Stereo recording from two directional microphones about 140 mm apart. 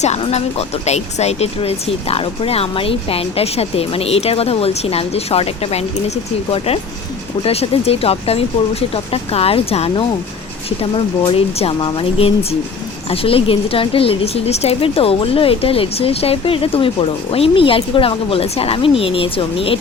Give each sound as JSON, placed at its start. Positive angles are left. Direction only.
{"t": 0.0, "sound": "speech", "side_deg": 50}
{"t": 7.4, "sound": "a woman's voice", "side_deg": 45}